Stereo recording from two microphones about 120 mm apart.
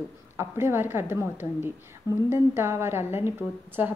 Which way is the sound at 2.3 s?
20° right (ahead or behind).